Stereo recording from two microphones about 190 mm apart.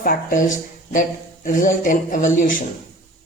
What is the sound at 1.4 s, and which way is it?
A man's voice, 45° left (ahead or behind).